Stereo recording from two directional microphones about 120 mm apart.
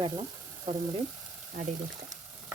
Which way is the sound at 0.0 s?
50° right (ahead or behind).